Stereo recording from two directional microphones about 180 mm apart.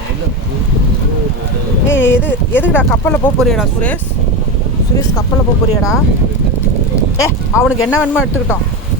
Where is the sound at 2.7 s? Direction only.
10° left (ahead or behind).